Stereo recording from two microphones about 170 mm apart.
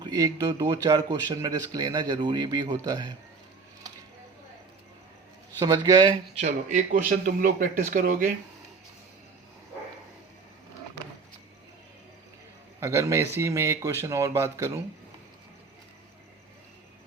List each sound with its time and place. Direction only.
0.0 s speech: 25° right (ahead or behind)
5.5 s speech: 25° right (ahead or behind)
6.4 s speech: 45° right (ahead or behind)
12.8 s speech: 15° right (ahead or behind)